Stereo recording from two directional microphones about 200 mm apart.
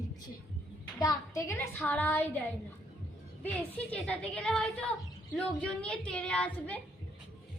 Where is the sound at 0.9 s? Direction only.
20° left (ahead or behind).